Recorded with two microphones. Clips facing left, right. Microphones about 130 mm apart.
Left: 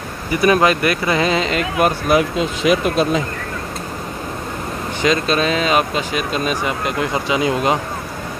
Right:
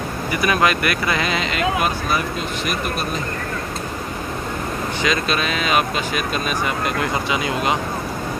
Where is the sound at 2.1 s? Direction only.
90° left.